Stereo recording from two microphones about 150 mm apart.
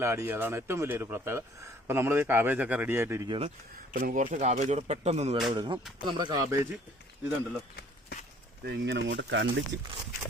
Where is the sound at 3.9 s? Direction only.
65° right (ahead or behind); by 5.4 s 45° right (ahead or behind).